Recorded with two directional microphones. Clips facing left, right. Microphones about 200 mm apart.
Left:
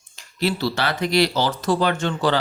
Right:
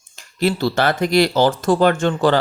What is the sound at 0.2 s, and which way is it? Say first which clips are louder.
Speech: right 4 dB; 50° right (ahead or behind).